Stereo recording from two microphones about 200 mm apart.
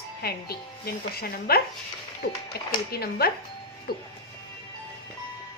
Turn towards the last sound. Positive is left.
turn(degrees=50)  # may be behind; listen again after turning